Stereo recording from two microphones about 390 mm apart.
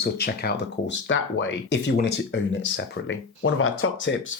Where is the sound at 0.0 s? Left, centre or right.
Left.